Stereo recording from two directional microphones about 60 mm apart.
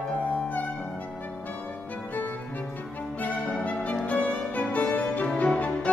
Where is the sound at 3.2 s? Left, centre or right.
Left.